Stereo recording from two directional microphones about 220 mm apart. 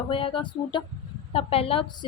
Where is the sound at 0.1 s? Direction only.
25° left (ahead or behind).